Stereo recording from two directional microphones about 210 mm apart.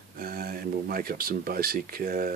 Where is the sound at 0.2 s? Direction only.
45° right (ahead or behind).